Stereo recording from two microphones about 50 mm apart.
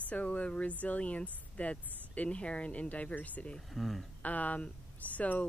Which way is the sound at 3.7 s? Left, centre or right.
Centre.